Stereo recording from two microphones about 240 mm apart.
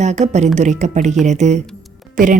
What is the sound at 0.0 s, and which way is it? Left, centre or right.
Speech, right.